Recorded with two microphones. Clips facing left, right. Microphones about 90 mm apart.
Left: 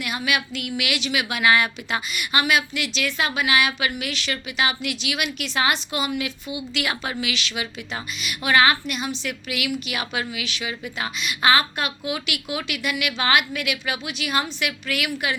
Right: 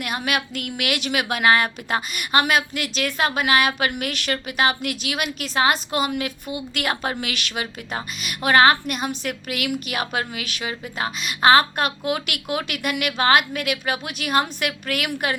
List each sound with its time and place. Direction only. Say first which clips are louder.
0.0 s a woman's voice: right 1 dB; 45° right (ahead or behind)